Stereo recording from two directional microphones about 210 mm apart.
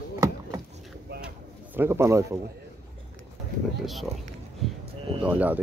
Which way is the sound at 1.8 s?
15° right (ahead or behind).